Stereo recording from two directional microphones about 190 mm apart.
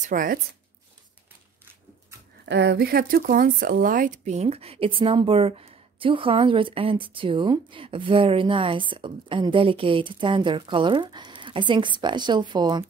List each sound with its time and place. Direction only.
0.0 s speech: 45° right (ahead or behind)
2.4 s speech: 65° right (ahead or behind); by 12.8 s 20° right (ahead or behind)